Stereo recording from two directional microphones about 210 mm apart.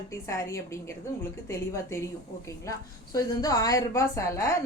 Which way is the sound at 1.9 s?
15° left (ahead or behind).